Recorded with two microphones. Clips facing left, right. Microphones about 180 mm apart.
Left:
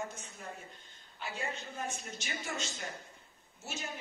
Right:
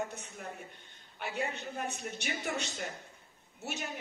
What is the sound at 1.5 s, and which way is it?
A man's voice, 65° right (ahead or behind).